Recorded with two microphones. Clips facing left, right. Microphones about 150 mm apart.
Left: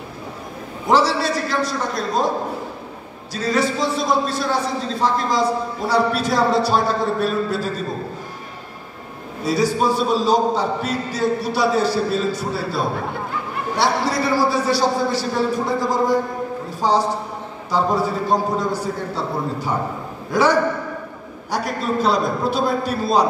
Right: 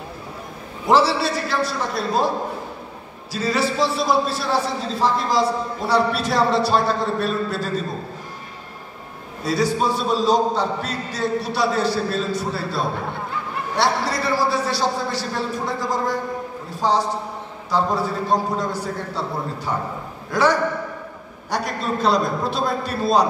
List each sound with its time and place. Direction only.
0.8 s a man's voice: 5° right (ahead or behind)
3.3 s a man's voice: 5° right (ahead or behind)
9.4 s a man's voice: centre (ahead or behind)
21.5 s a man's voice: centre (ahead or behind)